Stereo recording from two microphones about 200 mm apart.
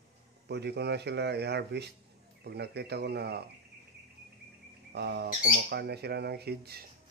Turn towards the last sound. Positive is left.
turn(degrees=-50)  # may be behind; listen again after turning